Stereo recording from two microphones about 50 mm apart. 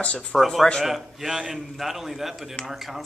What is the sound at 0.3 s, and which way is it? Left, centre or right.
Speech, centre.